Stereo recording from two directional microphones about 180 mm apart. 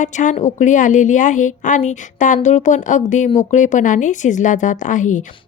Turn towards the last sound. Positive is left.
turn(degrees=45)  # may be behind; listen again after turning